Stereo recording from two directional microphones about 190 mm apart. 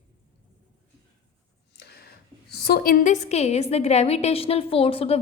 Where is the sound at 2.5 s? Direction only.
55° left (ahead or behind).